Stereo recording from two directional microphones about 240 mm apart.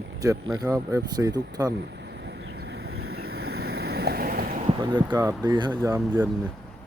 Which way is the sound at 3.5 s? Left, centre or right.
Right.